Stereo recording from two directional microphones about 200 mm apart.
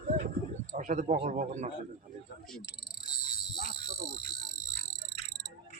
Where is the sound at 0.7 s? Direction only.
40° right (ahead or behind).